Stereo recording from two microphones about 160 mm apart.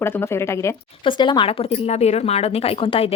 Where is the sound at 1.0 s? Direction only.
30° left (ahead or behind).